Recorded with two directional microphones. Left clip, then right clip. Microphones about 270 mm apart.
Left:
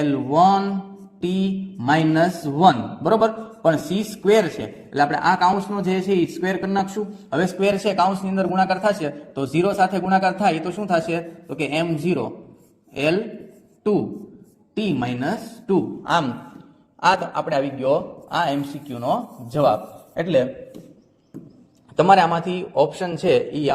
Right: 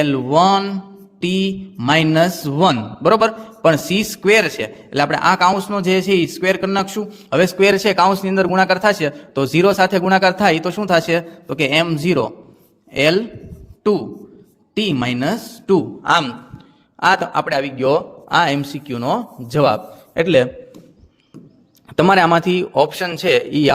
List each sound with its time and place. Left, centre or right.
0.0 s mantra: right
7.4 s a man's voice: right
13.8 s mantra: right
17.0 s a man's voice: right
21.9 s a man's voice: right